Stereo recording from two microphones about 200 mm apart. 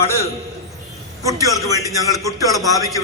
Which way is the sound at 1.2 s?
15° right (ahead or behind).